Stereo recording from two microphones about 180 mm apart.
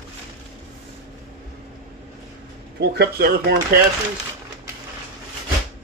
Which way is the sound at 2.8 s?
65° right (ahead or behind).